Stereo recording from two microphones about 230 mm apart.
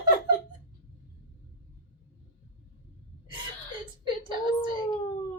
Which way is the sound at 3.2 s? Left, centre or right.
Right.